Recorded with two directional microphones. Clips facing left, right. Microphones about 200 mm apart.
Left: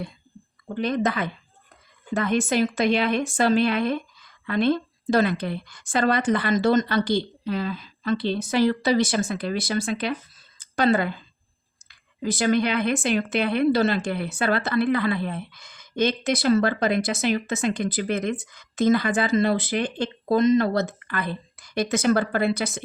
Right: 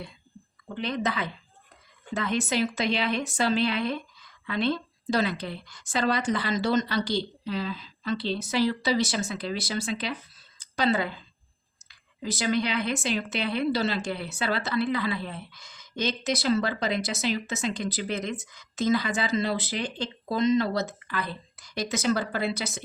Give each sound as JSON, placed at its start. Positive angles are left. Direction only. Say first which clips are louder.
{"t": 0.7, "sound": "a woman's voice", "louder": "left 5 dB", "side_deg": 45}
{"t": 10.6, "sound": "a sound", "louder": "left 5 dB", "side_deg": 55}
{"t": 11.9, "sound": "a woman's voice", "louder": "left 6 dB", "side_deg": 55}